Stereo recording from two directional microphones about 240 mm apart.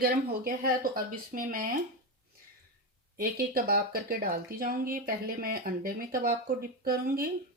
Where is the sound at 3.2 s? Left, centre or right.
Right.